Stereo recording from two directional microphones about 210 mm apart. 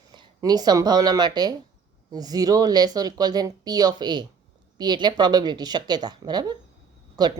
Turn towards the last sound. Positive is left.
turn(degrees=-20)  # may be behind; listen again after turning